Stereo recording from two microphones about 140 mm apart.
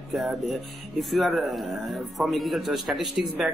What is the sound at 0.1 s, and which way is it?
A man's voice, centre (ahead or behind).